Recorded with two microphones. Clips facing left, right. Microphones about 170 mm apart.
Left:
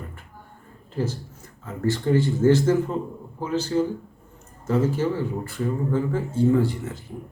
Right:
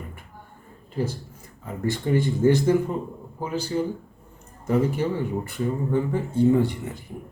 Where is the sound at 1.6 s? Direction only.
15° right (ahead or behind).